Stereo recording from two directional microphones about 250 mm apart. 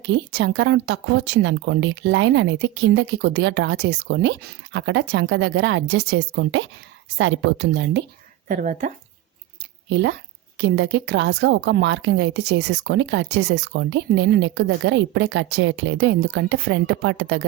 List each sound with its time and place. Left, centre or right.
0.1 s speech: right
8.4 s speech: right
9.9 s speech: right